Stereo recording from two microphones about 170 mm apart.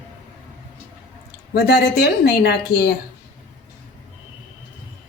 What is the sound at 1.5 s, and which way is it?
Speech, 70° left (ahead or behind).